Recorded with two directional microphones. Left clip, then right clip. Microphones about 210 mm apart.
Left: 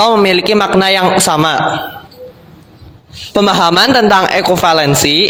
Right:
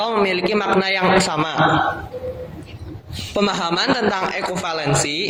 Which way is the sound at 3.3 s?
55° left (ahead or behind).